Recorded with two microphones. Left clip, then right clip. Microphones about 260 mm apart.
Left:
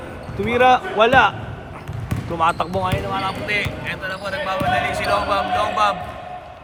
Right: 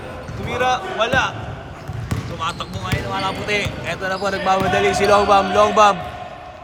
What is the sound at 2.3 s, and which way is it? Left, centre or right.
Speech, left.